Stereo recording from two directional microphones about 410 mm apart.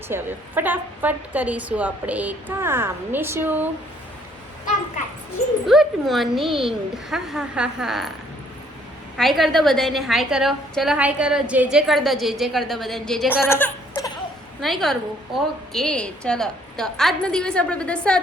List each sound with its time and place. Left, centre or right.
0.1 s a woman's voice: centre
5.6 s a woman's voice: centre
9.1 s a woman's voice: centre